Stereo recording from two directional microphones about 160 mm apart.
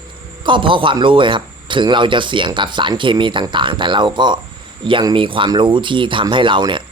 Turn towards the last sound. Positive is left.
turn(degrees=-30)  # may be behind; listen again after turning